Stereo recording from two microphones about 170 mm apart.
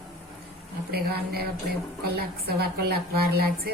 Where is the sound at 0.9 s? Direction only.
65° right (ahead or behind).